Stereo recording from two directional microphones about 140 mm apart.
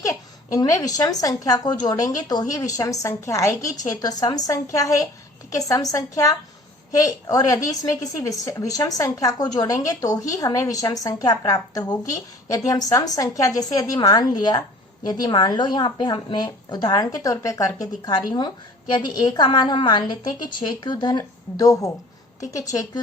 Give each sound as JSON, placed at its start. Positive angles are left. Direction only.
{"t": 0.0, "sound": "a woman's voice", "side_deg": 25}